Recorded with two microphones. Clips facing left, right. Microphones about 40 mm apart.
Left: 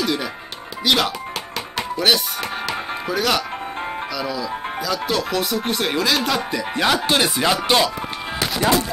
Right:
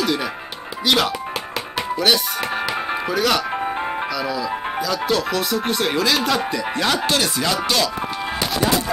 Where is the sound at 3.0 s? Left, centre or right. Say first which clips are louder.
Even; centre.